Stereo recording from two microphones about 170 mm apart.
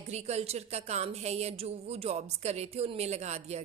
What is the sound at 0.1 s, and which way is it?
A woman's voice, 40° right (ahead or behind).